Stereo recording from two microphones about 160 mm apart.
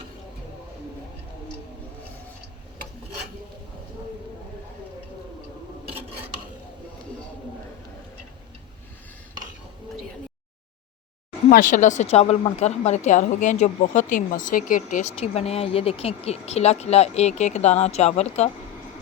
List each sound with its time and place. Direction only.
11.4 s a woman's voice: 60° left (ahead or behind)